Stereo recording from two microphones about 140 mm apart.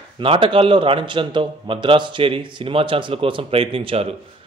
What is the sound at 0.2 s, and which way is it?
A man's voice, 40° right (ahead or behind).